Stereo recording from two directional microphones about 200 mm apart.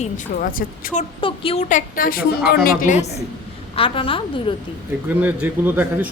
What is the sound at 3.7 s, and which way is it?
Speech, 25° left (ahead or behind).